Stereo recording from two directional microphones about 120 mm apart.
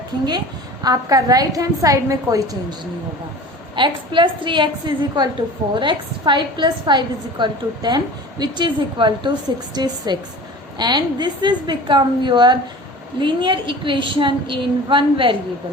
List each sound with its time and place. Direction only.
0.3 s a woman's voice: 35° right (ahead or behind)
3.8 s a woman's voice: 40° right (ahead or behind)